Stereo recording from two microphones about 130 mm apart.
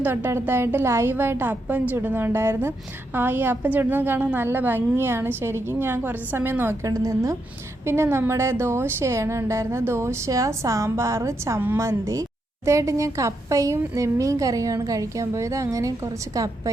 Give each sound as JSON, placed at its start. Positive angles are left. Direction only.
{"t": 0.0, "sound": "a woman's voice", "side_deg": -15}